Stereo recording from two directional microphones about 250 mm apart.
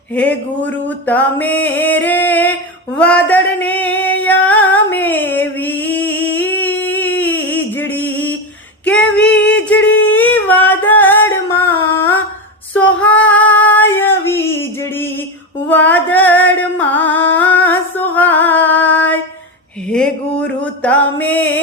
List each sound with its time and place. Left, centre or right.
0.1 s a sound: centre
8.8 s female singing: centre
9.6 s a sound: centre
10.1 s singing: centre
12.7 s female singing: centre
15.7 s music: centre